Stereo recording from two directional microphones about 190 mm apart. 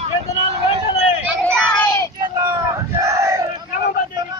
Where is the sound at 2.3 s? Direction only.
20° right (ahead or behind).